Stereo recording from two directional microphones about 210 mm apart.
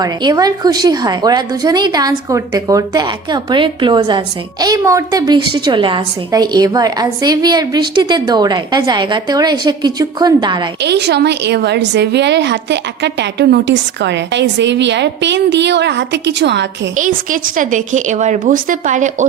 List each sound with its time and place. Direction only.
0.0 s a woman's voice: 20° right (ahead or behind)
10.8 s a woman's voice: 55° right (ahead or behind)
17.0 s a woman's voice: 40° right (ahead or behind)